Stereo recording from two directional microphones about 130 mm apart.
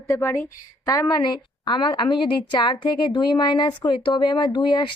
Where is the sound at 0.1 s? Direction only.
20° left (ahead or behind).